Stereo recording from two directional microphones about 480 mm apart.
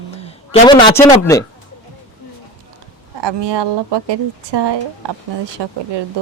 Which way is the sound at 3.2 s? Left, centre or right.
Right.